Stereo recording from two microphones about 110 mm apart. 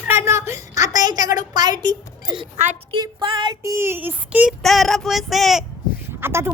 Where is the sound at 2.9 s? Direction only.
45° right (ahead or behind).